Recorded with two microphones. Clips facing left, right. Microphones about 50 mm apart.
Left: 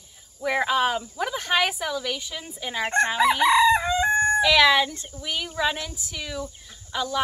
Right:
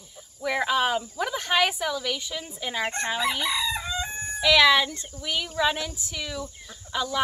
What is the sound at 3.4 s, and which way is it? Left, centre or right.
Chicken, left.